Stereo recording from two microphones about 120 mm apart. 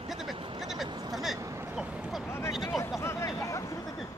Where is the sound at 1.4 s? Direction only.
20° right (ahead or behind).